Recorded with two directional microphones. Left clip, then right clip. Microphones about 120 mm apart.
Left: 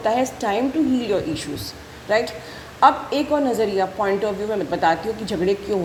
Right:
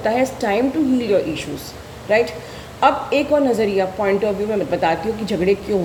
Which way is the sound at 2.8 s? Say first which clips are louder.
Even; 35° left (ahead or behind).